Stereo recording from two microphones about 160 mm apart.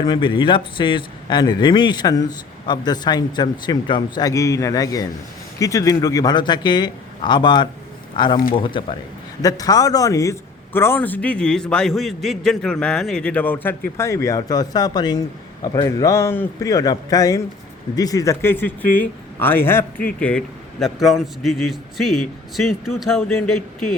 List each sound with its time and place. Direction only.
0.0 s a man's voice: 30° left (ahead or behind); by 23.9 s centre (ahead or behind)